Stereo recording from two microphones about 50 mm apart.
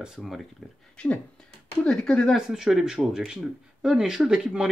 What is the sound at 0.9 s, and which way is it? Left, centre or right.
Speech, left.